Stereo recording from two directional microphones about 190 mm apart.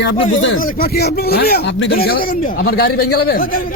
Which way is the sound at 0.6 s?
55° left (ahead or behind).